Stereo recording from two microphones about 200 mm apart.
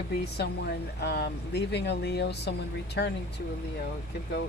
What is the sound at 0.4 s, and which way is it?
Speech, 55° left (ahead or behind).